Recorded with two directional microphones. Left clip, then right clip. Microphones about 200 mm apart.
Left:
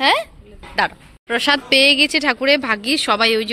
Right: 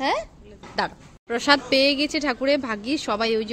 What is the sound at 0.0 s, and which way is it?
Speech, centre (ahead or behind).